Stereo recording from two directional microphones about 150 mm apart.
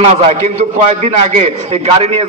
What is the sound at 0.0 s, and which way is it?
A man's voice, 45° right (ahead or behind).